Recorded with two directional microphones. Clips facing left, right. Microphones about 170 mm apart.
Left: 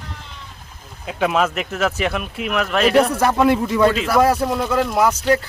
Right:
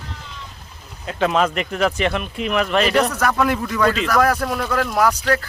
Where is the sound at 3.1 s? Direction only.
25° left (ahead or behind).